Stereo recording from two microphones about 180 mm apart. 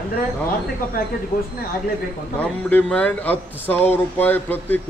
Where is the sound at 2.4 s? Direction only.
5° left (ahead or behind).